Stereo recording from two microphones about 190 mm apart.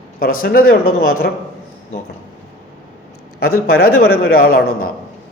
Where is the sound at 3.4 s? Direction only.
55° left (ahead or behind).